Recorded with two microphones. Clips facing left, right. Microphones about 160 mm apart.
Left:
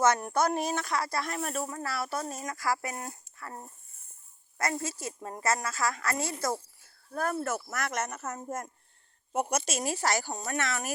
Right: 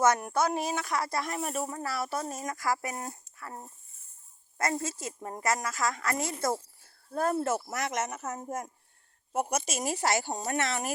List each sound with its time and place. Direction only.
0.0 s a woman's voice: 15° right (ahead or behind)
0.3 s a woman's voice: 5° right (ahead or behind)
0.9 s speech: 20° right (ahead or behind)
3.4 s a woman's voice: 10° right (ahead or behind)
4.5 s speech: 25° right (ahead or behind)